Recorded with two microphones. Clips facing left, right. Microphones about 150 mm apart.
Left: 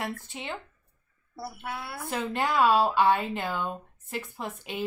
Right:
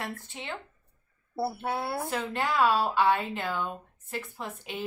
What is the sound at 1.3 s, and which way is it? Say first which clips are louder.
Speech: right 7 dB; 30° right (ahead or behind).